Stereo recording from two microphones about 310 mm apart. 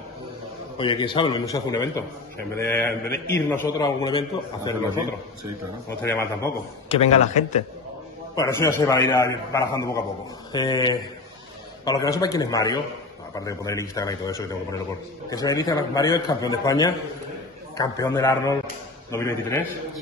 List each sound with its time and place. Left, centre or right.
0.7 s a man's voice: centre
6.0 s a man's voice: centre
6.9 s a man's voice: centre
8.5 s a man's voice: centre